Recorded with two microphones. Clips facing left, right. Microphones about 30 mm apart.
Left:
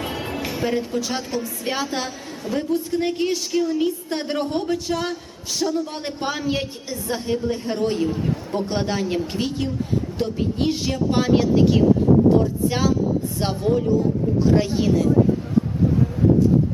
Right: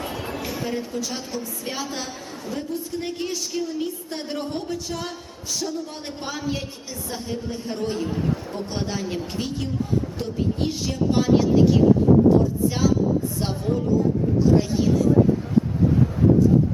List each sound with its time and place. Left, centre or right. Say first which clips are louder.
0.0 s music: left 2 dB; left
0.4 s a sound: left 6 dB; left
1.0 s a woman's voice: left 4 dB; left
7.8 s a woman's voice: left 2 dB; left